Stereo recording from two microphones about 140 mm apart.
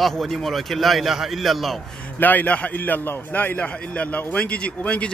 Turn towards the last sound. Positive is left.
turn(degrees=10)  # may be behind; listen again after turning